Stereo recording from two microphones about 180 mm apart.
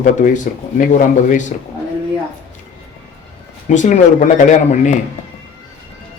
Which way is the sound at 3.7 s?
45° left (ahead or behind).